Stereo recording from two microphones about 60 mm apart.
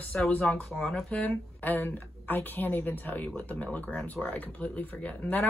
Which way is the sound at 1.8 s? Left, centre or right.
Left.